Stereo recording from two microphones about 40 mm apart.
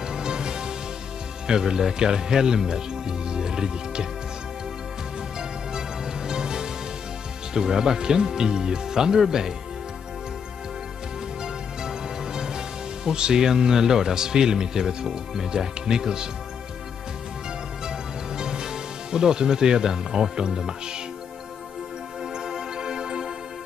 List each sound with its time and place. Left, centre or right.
0.1 s music: centre
1.5 s speech: centre
5.8 s music: centre
7.5 s speech: centre
12.4 s speech: centre
18.4 s speech: centre
22.2 s music: centre